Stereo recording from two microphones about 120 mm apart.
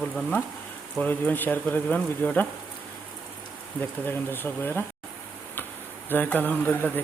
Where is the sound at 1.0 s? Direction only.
15° left (ahead or behind).